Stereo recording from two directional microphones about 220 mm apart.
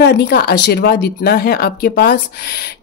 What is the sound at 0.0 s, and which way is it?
Speech, 45° left (ahead or behind).